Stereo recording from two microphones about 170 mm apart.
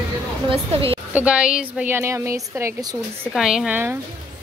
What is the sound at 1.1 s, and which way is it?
A woman's voice, 5° right (ahead or behind).